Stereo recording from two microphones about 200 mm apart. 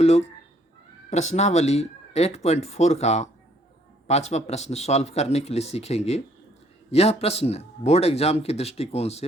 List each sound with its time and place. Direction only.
0.0 s speech: 30° left (ahead or behind)